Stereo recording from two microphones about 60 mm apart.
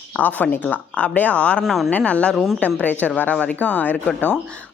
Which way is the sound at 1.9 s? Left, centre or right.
Left.